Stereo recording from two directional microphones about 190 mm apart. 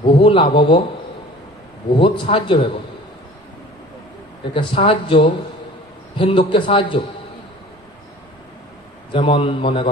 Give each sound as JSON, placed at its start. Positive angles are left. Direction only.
{"t": 0.0, "sound": "a man's voice", "side_deg": 30}
{"t": 1.9, "sound": "a man's voice", "side_deg": 25}
{"t": 4.6, "sound": "a man's voice", "side_deg": 25}
{"t": 9.1, "sound": "a man's voice", "side_deg": 30}